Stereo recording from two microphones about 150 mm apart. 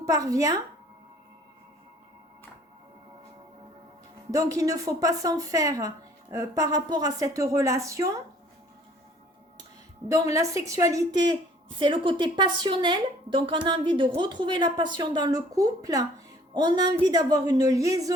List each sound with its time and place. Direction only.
0.0 s a woman's voice: 25° right (ahead or behind)
4.3 s a woman's voice: 25° right (ahead or behind)
10.1 s a woman's voice: 20° right (ahead or behind)